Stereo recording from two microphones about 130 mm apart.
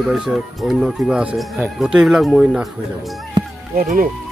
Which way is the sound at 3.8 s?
90° right.